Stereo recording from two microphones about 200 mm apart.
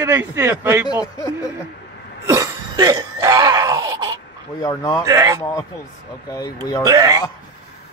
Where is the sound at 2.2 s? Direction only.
15° right (ahead or behind).